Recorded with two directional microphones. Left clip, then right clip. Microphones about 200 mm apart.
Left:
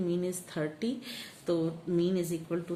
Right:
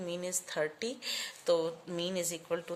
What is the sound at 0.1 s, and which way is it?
A woman's voice, 40° right (ahead or behind).